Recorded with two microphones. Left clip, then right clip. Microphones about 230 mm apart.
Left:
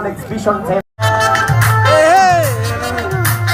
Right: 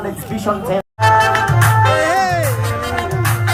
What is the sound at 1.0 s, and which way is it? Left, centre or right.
Music, centre.